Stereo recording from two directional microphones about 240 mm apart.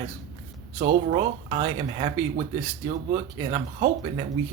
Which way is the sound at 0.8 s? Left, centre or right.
Right.